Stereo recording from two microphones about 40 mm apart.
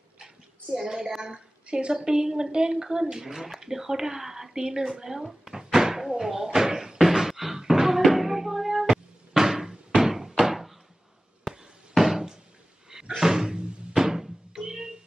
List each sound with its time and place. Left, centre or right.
0.7 s a woman's voice: centre
5.2 s cupboard open or close: centre
12.0 s a sound: centre
13.2 s music: centre